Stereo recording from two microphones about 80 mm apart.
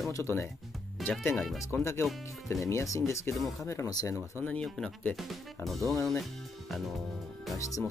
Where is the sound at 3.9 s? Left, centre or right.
Left.